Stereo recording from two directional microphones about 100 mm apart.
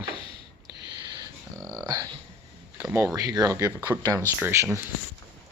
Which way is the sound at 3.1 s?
35° right (ahead or behind).